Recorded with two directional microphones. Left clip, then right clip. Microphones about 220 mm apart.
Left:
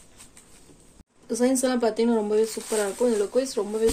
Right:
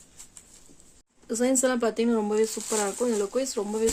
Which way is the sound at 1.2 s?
45° right (ahead or behind).